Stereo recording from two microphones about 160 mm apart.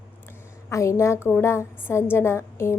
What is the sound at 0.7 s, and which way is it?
A woman's voice, 20° left (ahead or behind).